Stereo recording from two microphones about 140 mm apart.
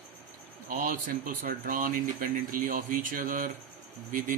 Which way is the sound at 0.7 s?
90° right.